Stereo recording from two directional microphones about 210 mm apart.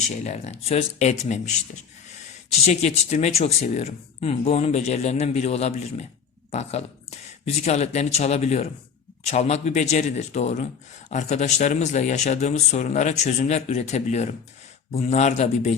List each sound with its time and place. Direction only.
0.3 s speech: 30° left (ahead or behind)
2.5 s speech: 30° left (ahead or behind)